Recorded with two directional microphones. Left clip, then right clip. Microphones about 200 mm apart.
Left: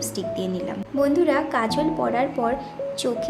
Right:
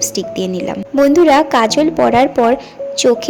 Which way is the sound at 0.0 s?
35° right (ahead or behind).